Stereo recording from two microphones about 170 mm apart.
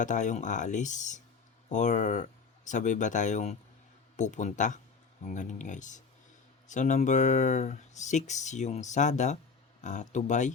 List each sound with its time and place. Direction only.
0.0 s speech: 45° left (ahead or behind)